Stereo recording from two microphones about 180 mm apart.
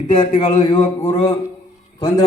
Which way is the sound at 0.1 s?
45° left (ahead or behind).